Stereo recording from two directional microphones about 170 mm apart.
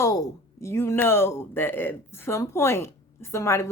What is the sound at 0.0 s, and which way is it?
Speech, 20° left (ahead or behind).